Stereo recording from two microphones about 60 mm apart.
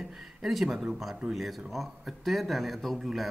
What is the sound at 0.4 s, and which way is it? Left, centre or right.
Speech, centre.